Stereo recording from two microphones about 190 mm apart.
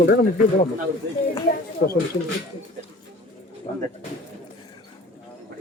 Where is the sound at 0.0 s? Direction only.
50° left (ahead or behind).